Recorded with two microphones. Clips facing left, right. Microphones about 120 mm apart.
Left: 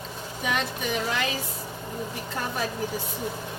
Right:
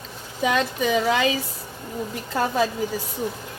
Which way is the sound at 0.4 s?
90° right.